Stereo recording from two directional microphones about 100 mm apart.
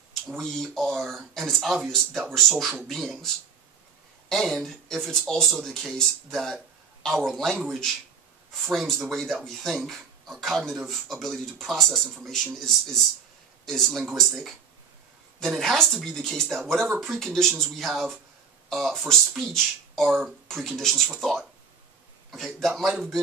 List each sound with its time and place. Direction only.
0.4 s speech: 5° left (ahead or behind)